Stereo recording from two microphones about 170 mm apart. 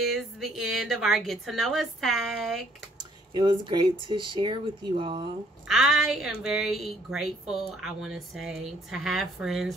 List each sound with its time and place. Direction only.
0.0 s a woman's voice: centre (ahead or behind)
3.3 s speech: 25° right (ahead or behind)
5.7 s a woman's voice: centre (ahead or behind)